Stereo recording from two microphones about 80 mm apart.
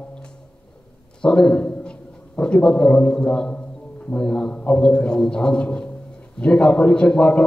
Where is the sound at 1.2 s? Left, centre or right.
Centre.